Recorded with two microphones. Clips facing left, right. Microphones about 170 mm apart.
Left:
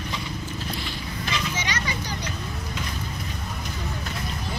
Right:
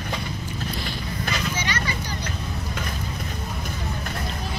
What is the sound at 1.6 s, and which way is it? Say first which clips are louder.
Vehicle: right 2 dB; 15° left (ahead or behind).